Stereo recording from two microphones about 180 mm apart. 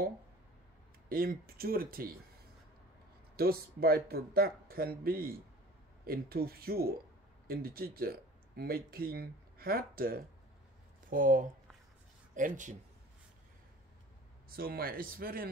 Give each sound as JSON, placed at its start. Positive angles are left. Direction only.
{"t": 1.0, "sound": "speech", "side_deg": -55}
{"t": 3.3, "sound": "speech", "side_deg": -55}
{"t": 14.5, "sound": "speech", "side_deg": -55}